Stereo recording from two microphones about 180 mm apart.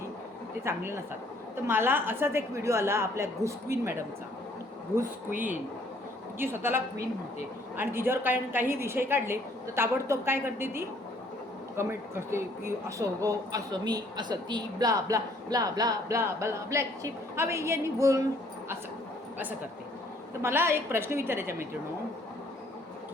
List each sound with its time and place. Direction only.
0.6 s a woman's voice: 15° right (ahead or behind)
6.4 s a woman's voice: 10° right (ahead or behind)
20.4 s a woman's voice: 15° right (ahead or behind)